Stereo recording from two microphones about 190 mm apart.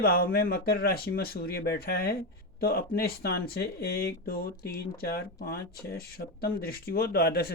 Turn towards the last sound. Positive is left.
turn(degrees=55)  # may be behind; listen again after turning